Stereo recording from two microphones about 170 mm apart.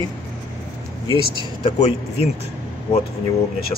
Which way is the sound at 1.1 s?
30° right (ahead or behind).